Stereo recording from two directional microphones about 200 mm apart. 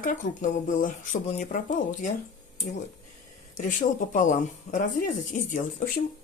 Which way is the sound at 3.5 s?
40° left (ahead or behind).